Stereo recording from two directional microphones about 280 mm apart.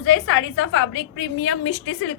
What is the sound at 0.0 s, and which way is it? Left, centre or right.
A woman's voice, left.